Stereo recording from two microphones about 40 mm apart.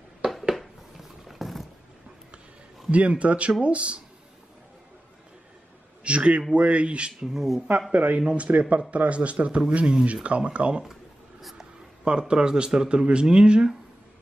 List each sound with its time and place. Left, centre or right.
0.2 s a sound: centre
0.6 s a sound: centre
2.9 s speech: right
6.0 s a man's voice: right
7.1 s speech: centre
7.9 s speech: right
10.2 s speech: right